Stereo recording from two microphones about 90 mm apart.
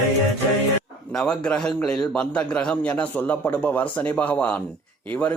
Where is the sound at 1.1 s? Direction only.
5° left (ahead or behind).